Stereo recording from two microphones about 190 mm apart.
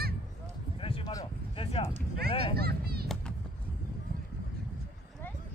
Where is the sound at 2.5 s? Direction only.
55° right (ahead or behind).